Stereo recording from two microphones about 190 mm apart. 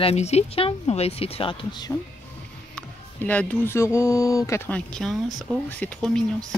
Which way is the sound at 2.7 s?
5° left (ahead or behind).